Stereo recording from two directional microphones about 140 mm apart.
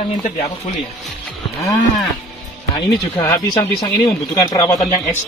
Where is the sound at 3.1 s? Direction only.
15° left (ahead or behind).